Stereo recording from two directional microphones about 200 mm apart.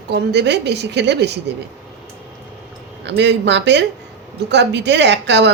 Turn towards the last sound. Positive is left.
turn(degrees=-60)  # may be behind; listen again after turning